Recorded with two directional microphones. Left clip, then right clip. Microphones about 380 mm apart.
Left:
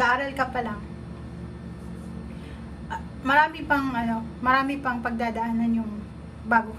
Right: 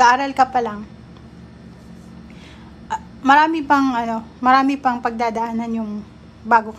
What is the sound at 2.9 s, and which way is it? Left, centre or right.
A woman's voice, centre.